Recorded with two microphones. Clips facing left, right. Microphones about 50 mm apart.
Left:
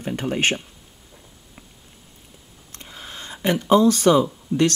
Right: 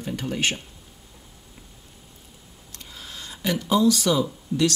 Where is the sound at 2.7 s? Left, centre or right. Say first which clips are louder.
Left 3 dB; left.